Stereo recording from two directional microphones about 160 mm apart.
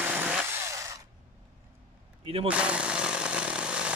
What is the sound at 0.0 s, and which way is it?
Chainsaw, 10° right (ahead or behind).